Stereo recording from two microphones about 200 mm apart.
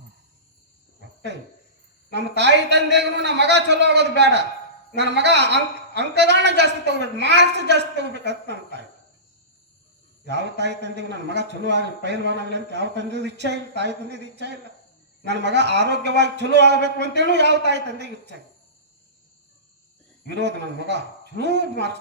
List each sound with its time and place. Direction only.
1.3 s a man's voice: 60° right (ahead or behind)
10.2 s a man's voice: 60° right (ahead or behind)
15.3 s a man's voice: 60° right (ahead or behind)
20.3 s a man's voice: 60° right (ahead or behind)